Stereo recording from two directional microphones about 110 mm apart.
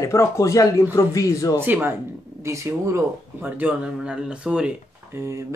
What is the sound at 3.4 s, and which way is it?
Speech, 10° right (ahead or behind).